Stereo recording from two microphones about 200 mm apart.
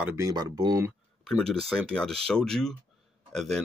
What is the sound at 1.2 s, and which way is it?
Speech, 5° left (ahead or behind).